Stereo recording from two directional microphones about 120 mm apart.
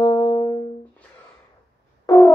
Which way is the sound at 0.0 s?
45° left (ahead or behind).